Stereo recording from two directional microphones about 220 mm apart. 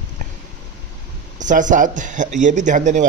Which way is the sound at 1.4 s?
35° right (ahead or behind).